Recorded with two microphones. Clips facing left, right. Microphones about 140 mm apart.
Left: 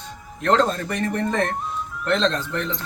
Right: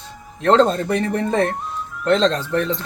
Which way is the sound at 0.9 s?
5° right (ahead or behind).